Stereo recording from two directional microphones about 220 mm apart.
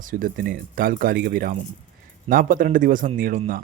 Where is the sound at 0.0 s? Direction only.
40° right (ahead or behind).